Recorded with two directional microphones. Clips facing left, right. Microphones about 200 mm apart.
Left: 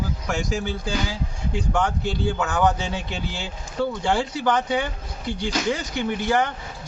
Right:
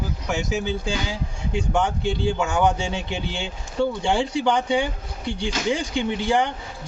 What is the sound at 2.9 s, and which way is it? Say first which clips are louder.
Speech: right 1 dB; 25° right (ahead or behind).